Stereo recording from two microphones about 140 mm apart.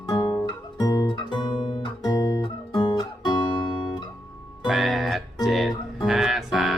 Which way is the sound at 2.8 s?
30° left (ahead or behind).